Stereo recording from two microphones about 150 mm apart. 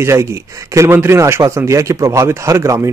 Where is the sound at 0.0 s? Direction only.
20° right (ahead or behind).